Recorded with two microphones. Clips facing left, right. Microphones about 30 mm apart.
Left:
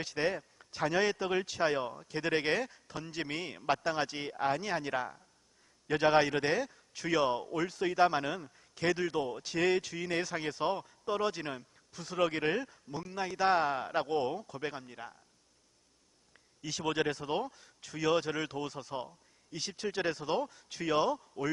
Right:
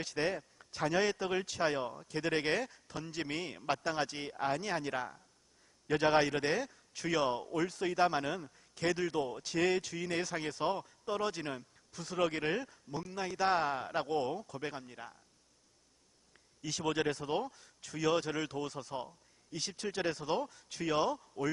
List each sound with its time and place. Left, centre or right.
0.0 s a man's voice: centre
16.6 s a man's voice: centre